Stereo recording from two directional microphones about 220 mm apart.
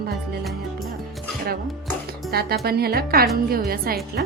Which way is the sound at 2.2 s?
45° right (ahead or behind).